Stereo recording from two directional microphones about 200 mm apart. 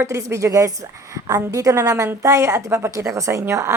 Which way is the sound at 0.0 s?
15° right (ahead or behind).